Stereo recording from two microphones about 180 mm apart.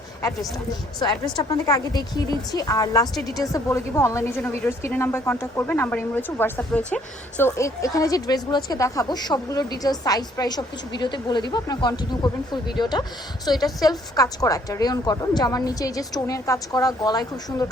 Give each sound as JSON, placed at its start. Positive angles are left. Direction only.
{"t": 0.9, "sound": "speech", "side_deg": 25}